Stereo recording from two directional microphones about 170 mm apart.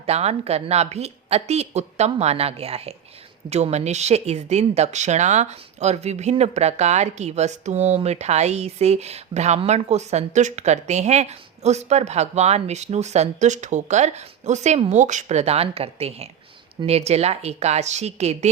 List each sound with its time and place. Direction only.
0.0 s speech: 40° right (ahead or behind)